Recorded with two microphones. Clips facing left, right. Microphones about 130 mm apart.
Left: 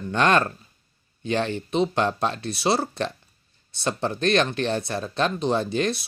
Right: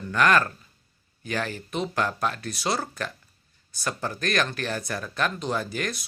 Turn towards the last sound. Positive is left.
turn(degrees=25)  # may be behind; listen again after turning